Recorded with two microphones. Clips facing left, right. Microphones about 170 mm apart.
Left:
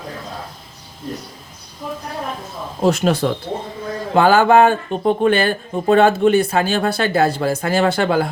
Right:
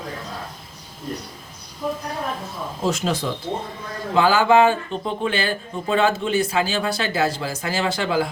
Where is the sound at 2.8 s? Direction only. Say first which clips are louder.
Left 7 dB; 60° left (ahead or behind).